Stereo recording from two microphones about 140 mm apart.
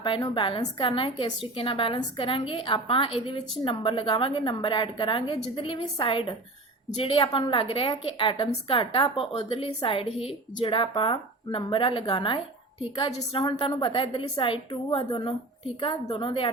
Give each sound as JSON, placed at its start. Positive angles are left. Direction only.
{"t": 0.3, "sound": "a woman's voice", "side_deg": 35}